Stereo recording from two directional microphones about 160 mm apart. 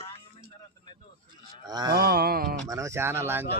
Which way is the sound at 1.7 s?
25° right (ahead or behind).